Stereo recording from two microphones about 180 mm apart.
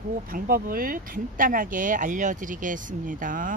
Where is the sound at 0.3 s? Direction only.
50° right (ahead or behind).